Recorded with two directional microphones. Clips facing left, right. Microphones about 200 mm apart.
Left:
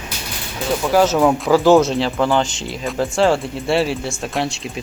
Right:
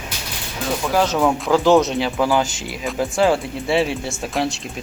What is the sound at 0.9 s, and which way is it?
A man's voice, 5° left (ahead or behind).